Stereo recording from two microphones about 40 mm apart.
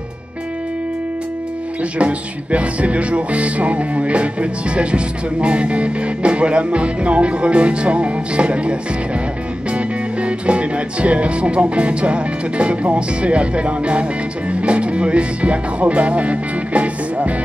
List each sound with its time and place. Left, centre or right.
1.8 s music: right
9.7 s speech: right
14.5 s music: right